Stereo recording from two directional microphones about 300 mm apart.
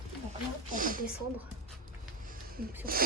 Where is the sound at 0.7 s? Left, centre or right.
Right.